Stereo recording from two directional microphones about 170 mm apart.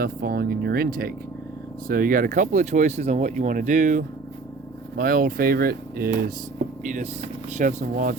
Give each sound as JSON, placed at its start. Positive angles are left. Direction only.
{"t": 0.0, "sound": "speech", "side_deg": -65}
{"t": 4.9, "sound": "speech", "side_deg": -60}
{"t": 6.8, "sound": "speech", "side_deg": -45}